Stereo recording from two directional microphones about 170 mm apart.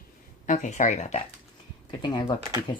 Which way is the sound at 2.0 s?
25° left (ahead or behind).